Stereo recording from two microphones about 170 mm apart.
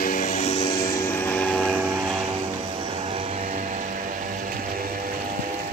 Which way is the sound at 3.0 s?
35° right (ahead or behind).